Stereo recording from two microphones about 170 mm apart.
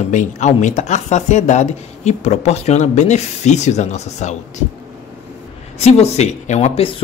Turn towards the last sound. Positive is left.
turn(degrees=40)  # may be behind; listen again after turning